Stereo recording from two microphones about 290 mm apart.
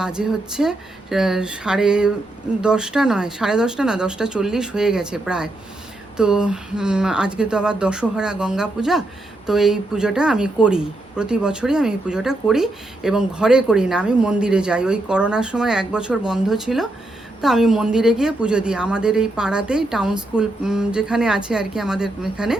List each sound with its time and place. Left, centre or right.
0.0 s speech: centre